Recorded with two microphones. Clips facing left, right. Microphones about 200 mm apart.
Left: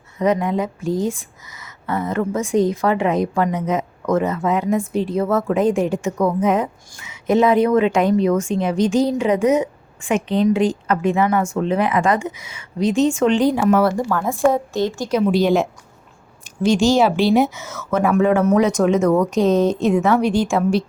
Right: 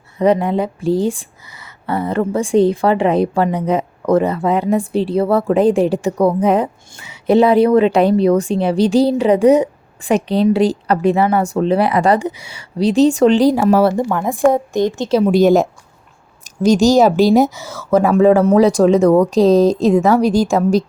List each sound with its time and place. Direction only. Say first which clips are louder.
0.2 s speech: right 4 dB; 30° right (ahead or behind)
15.3 s a woman's voice: right 6 dB; 45° right (ahead or behind)